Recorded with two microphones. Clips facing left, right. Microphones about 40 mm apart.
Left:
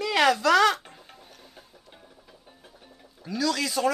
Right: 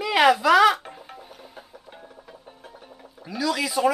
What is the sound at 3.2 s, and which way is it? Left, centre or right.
Speech, centre.